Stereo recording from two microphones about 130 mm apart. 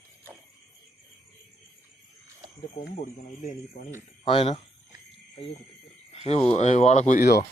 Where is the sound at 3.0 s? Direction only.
80° left.